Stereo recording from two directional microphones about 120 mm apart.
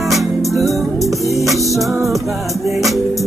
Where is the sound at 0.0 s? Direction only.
Centre (ahead or behind).